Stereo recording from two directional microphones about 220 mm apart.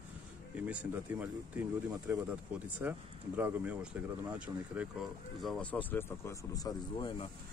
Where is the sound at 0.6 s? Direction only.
5° right (ahead or behind); by 7.2 s 20° left (ahead or behind).